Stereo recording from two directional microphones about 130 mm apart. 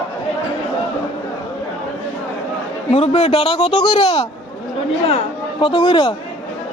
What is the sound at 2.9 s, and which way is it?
A man's voice, 50° left (ahead or behind).